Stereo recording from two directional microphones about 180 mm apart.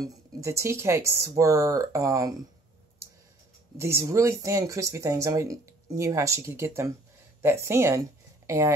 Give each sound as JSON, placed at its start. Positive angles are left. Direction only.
{"t": 0.0, "sound": "speech", "side_deg": -15}
{"t": 3.7, "sound": "a woman's voice", "side_deg": -15}